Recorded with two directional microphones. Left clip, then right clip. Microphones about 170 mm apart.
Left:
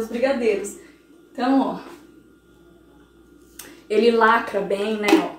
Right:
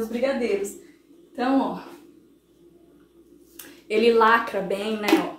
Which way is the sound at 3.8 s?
20° right (ahead or behind).